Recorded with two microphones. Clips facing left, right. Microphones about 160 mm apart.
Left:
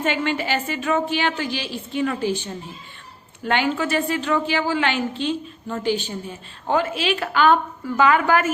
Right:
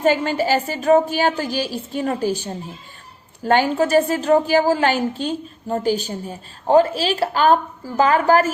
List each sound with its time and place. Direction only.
0.0 s a woman's voice: 40° right (ahead or behind)